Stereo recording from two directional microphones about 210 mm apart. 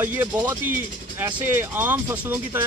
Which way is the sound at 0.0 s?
10° right (ahead or behind).